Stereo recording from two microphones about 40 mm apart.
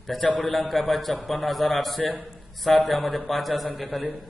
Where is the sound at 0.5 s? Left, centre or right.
Centre.